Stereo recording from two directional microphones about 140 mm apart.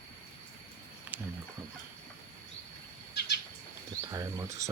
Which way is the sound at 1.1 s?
10° right (ahead or behind).